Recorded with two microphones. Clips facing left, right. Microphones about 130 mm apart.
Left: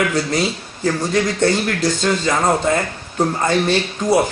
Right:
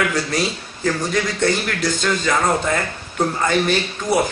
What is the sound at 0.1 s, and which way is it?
Speech, 25° left (ahead or behind).